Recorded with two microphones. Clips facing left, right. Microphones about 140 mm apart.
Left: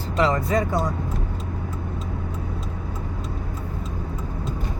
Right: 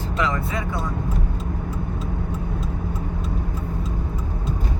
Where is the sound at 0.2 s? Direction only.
35° left (ahead or behind).